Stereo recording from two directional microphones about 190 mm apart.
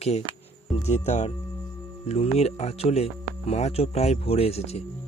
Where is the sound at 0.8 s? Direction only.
35° left (ahead or behind).